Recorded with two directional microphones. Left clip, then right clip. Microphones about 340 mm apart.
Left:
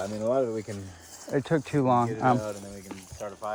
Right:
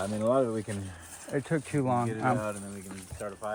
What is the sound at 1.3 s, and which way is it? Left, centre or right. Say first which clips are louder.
Speech: left 4 dB; left.